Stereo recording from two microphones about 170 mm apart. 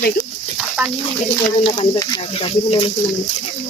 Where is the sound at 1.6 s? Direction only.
30° left (ahead or behind).